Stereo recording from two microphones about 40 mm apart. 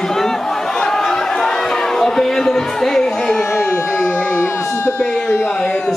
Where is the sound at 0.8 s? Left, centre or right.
Centre.